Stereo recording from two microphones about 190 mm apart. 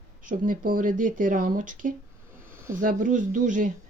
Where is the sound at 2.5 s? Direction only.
15° right (ahead or behind).